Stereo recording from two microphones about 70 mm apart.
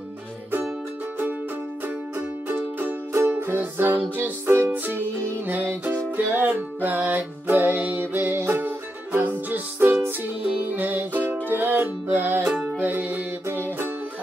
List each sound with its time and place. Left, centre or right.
2.1 s music: right